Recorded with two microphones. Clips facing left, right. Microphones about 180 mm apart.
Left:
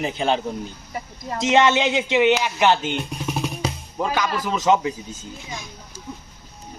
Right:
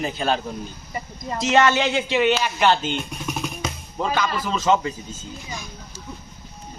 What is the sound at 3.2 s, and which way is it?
Music, 30° left (ahead or behind).